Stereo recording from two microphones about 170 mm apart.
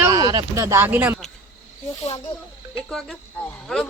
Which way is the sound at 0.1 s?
20° right (ahead or behind).